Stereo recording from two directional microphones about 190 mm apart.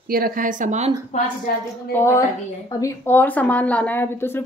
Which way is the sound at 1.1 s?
40° left (ahead or behind).